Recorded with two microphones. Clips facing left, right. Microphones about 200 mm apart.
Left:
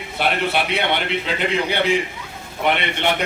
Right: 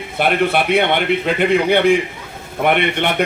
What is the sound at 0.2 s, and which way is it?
A man's voice, 50° right (ahead or behind).